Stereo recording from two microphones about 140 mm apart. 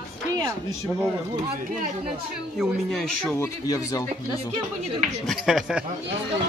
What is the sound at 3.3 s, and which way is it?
Speech, 20° left (ahead or behind).